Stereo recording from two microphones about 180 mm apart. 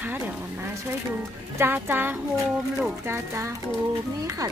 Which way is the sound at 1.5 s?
10° right (ahead or behind).